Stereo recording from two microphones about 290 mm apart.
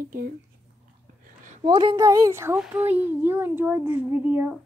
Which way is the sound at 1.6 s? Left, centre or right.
Centre.